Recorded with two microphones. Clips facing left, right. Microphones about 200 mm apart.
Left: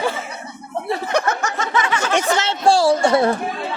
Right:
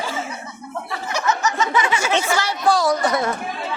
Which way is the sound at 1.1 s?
55° left (ahead or behind).